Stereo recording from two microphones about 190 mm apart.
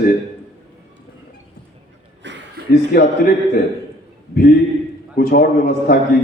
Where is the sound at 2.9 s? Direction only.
55° left (ahead or behind).